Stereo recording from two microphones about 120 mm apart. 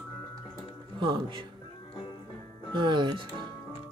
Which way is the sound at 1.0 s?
45° right (ahead or behind).